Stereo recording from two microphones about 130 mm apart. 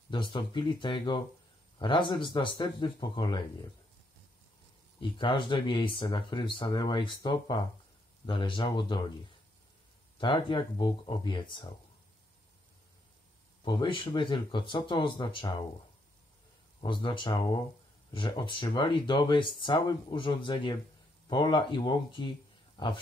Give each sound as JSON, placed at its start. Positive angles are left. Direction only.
{"t": 0.1, "sound": "speech", "side_deg": 35}
{"t": 5.0, "sound": "speech", "side_deg": 40}
{"t": 10.1, "sound": "speech", "side_deg": 40}
{"t": 13.7, "sound": "speech", "side_deg": 35}
{"t": 16.8, "sound": "speech", "side_deg": 40}